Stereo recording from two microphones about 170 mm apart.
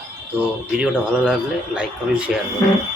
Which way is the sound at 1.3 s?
5° right (ahead or behind).